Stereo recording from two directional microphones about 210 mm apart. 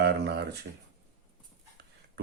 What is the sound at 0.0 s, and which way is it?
Speech, 50° right (ahead or behind).